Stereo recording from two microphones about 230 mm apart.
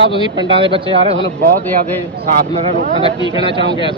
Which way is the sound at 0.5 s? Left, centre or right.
Right.